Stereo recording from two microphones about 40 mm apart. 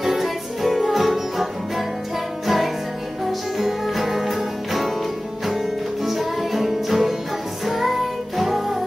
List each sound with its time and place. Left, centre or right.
0.0 s music: centre
6.0 s music: centre